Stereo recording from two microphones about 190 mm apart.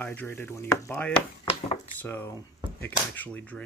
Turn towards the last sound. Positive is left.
turn(degrees=10)  # may be behind; listen again after turning